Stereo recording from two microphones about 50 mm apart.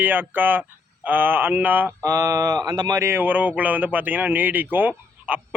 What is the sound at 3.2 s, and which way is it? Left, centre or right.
Speech, right.